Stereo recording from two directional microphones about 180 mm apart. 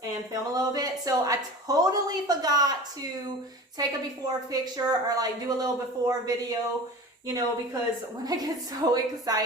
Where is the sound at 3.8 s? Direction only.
20° right (ahead or behind).